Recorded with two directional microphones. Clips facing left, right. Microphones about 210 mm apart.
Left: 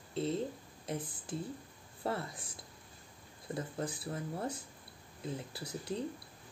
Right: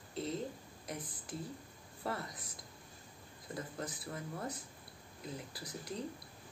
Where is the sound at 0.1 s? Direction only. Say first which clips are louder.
Left 4 dB; 30° left (ahead or behind).